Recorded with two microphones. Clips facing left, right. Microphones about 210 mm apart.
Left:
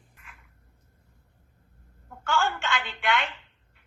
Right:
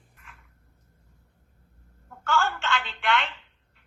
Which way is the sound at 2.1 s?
15° left (ahead or behind).